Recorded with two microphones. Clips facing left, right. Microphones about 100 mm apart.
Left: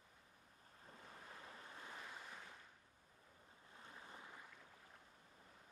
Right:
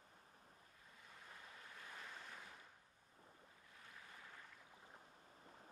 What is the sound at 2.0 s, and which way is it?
Boat, 10° left (ahead or behind).